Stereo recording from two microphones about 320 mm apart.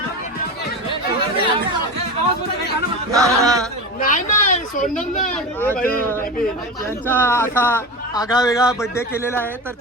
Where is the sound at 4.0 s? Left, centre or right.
Left.